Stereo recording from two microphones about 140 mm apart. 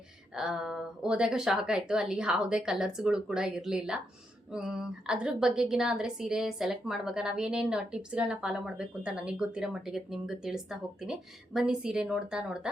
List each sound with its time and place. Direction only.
0.3 s a woman's voice: 5° right (ahead or behind)